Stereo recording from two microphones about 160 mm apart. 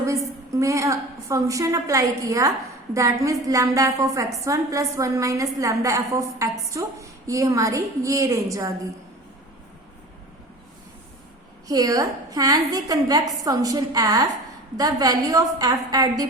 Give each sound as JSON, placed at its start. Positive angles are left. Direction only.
{"t": 0.0, "sound": "a woman's voice", "side_deg": -20}
{"t": 11.7, "sound": "a woman's voice", "side_deg": -25}